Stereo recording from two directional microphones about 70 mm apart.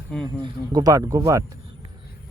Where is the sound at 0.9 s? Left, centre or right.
Right.